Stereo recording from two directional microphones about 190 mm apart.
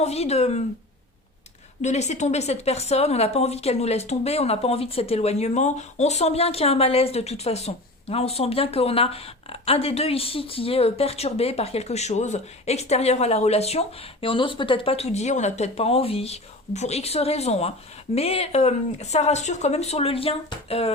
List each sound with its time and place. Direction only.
0.0 s speech: 35° left (ahead or behind)
1.8 s speech: 35° left (ahead or behind)